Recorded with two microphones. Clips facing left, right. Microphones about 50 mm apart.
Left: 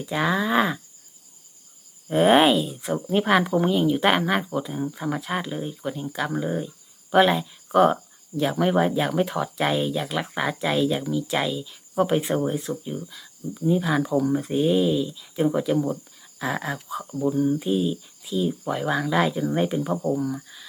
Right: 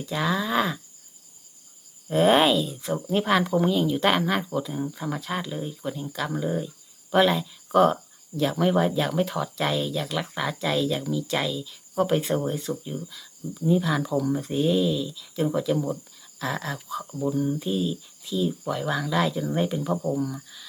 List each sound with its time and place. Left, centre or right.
0.0 s speech: centre
2.0 s speech: centre
17.0 s speech: centre